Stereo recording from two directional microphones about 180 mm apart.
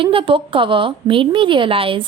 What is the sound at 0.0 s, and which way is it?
A woman's voice, 30° right (ahead or behind).